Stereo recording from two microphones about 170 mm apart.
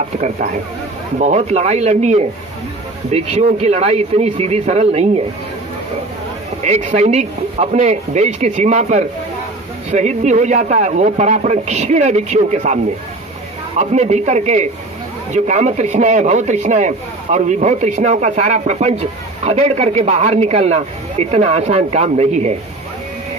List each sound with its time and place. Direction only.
1.2 s speech: 40° right (ahead or behind)
6.6 s a man's voice: 40° right (ahead or behind)